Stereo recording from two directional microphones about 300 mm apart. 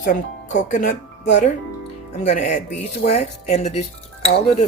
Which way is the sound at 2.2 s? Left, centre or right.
Left.